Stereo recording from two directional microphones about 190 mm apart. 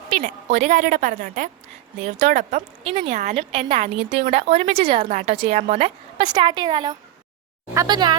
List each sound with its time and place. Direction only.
0.2 s a woman's voice: 40° right (ahead or behind)
6.2 s a woman's voice: 25° right (ahead or behind)